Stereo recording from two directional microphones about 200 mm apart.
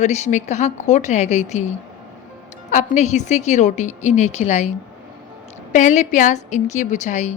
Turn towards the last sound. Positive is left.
turn(degrees=35)  # may be behind; listen again after turning